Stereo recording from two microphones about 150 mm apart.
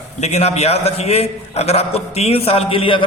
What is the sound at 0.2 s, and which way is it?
A man's voice, 45° left (ahead or behind).